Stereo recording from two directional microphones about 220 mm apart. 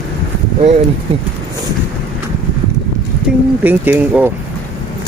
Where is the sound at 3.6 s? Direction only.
10° right (ahead or behind).